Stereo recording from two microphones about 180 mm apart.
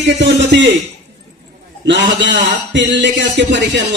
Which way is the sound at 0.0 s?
80° right.